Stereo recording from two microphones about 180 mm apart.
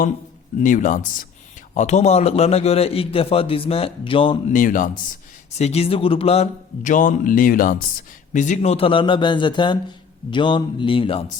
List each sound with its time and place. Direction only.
0.6 s a man's voice: 45° left (ahead or behind); by 4.5 s 30° left (ahead or behind)
4.5 s speech: 50° left (ahead or behind)
5.5 s a man's voice: 35° left (ahead or behind)